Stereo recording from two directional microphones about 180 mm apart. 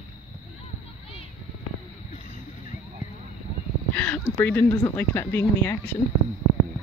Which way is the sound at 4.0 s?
10° left (ahead or behind).